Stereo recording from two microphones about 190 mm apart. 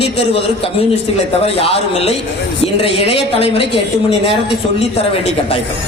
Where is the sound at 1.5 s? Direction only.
30° left (ahead or behind).